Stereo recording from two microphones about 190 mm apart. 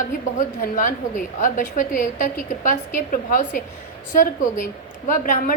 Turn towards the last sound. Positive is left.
turn(degrees=45)  # may be behind; listen again after turning